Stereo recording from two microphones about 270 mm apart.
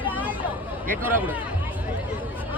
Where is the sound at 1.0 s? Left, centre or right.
Centre.